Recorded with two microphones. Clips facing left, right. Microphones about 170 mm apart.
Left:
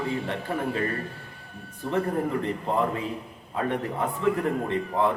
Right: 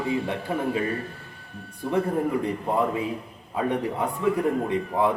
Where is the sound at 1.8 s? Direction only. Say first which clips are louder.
Right 2 dB; 10° right (ahead or behind).